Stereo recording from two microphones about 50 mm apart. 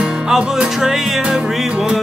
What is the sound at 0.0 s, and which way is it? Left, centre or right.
Music, centre.